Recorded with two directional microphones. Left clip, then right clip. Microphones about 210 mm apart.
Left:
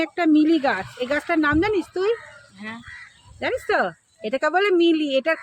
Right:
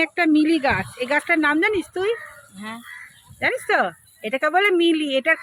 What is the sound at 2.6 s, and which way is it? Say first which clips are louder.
Speech: right 1 dB; 35° right (ahead or behind).